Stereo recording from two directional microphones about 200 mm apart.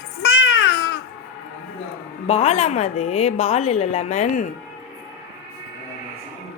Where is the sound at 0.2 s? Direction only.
65° left (ahead or behind).